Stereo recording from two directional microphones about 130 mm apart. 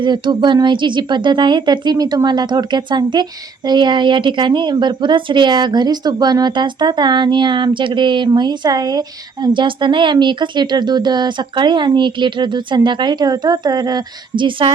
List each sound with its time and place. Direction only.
0.0 s a woman's voice: 35° right (ahead or behind)